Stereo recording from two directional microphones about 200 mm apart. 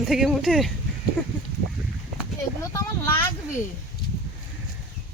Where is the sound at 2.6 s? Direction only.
15° left (ahead or behind).